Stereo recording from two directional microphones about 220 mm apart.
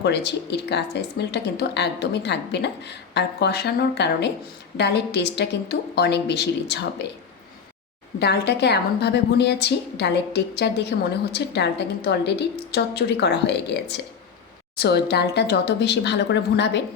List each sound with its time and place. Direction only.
0.0 s speech: 50° left (ahead or behind)
8.2 s speech: 50° left (ahead or behind)